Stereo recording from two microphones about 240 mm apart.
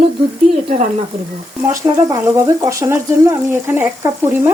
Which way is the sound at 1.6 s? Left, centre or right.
Centre.